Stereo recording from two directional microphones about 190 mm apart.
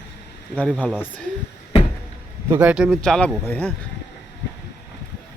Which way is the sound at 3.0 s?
5° left (ahead or behind).